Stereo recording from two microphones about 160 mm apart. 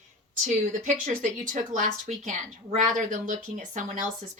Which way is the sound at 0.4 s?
50° right (ahead or behind).